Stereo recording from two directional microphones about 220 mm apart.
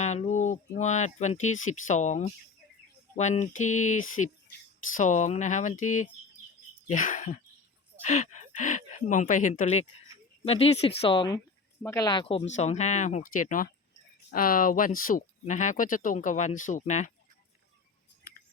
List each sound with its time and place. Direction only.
0.0 s speech: 30° left (ahead or behind)